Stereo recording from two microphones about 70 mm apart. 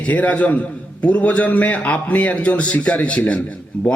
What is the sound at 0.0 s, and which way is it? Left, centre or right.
A man's voice, centre.